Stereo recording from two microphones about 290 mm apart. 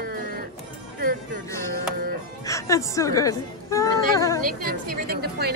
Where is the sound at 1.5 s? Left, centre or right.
Centre.